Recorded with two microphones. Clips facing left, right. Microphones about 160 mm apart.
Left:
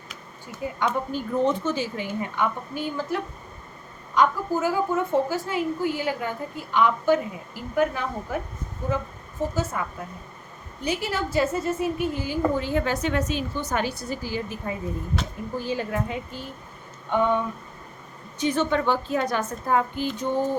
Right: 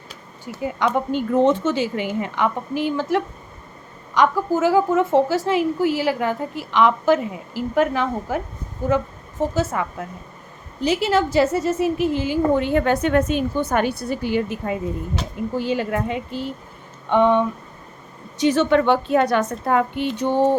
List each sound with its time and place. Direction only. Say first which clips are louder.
0.8 s a woman's voice: right 6 dB; 75° right (ahead or behind)
15.5 s a woman's voice: right 5 dB; 80° right